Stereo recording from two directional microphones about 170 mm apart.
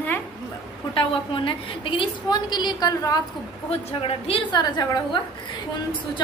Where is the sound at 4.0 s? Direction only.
35° left (ahead or behind).